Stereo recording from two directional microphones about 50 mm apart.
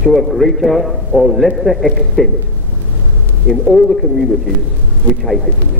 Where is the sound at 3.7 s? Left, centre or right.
Centre.